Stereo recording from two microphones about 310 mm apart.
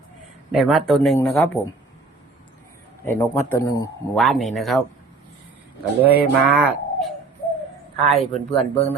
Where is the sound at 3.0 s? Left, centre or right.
Centre.